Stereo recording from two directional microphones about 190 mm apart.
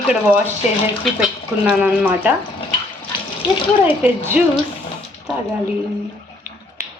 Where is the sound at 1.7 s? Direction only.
5° right (ahead or behind).